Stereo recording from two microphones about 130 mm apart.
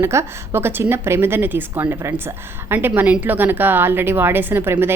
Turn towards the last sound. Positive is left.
turn(degrees=-15)  # may be behind; listen again after turning